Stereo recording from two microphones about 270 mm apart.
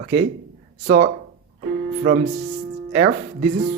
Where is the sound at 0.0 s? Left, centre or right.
Right.